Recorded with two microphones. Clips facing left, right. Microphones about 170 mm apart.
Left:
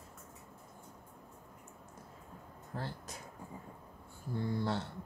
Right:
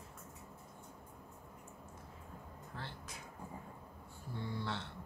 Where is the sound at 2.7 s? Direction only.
40° left (ahead or behind).